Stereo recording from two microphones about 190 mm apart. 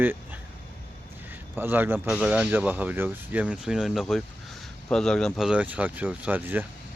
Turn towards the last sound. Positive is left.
turn(degrees=-10)  # may be behind; listen again after turning